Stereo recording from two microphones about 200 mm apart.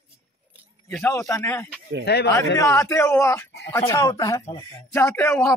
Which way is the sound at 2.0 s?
55° left (ahead or behind).